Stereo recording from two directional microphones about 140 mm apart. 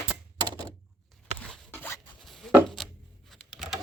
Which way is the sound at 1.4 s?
10° left (ahead or behind).